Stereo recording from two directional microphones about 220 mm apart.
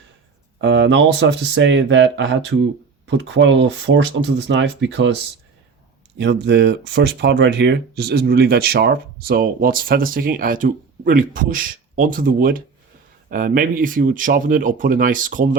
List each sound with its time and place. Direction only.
0.6 s speech: 55° right (ahead or behind); by 15.4 s 35° right (ahead or behind)